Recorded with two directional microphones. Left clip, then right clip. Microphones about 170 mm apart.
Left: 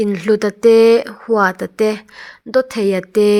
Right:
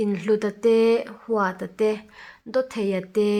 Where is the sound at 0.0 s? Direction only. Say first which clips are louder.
Left 7 dB; 35° left (ahead or behind).